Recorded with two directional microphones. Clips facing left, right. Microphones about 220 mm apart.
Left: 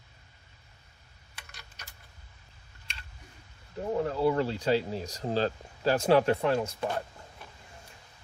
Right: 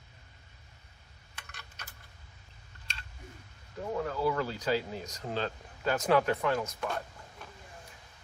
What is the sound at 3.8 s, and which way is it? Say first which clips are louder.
Speech: left 4 dB; 25° left (ahead or behind).